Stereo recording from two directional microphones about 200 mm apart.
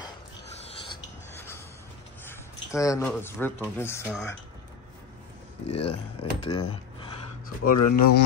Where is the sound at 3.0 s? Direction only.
10° left (ahead or behind).